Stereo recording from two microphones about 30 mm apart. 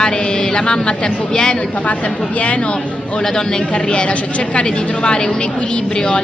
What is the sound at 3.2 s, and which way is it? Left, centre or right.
Speech, left.